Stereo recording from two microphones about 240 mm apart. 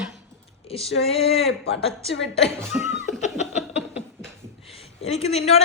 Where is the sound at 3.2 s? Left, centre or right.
Left.